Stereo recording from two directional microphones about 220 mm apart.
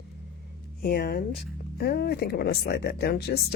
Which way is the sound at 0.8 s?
45° left (ahead or behind).